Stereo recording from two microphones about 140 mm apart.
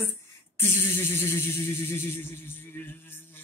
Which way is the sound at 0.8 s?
15° left (ahead or behind).